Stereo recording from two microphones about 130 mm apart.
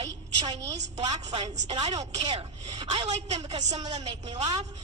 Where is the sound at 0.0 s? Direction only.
35° right (ahead or behind).